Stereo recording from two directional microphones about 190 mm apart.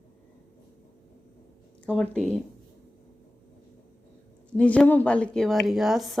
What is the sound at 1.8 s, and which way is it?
Speech, 5° left (ahead or behind).